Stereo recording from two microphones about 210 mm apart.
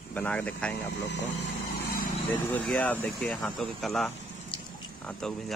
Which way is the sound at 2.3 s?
5° left (ahead or behind).